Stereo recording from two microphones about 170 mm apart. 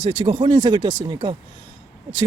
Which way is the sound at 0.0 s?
25° right (ahead or behind).